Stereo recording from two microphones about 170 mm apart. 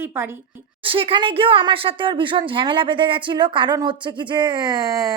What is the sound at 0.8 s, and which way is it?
Speech, 30° right (ahead or behind).